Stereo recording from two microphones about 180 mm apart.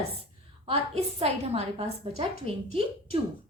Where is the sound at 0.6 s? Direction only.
35° right (ahead or behind).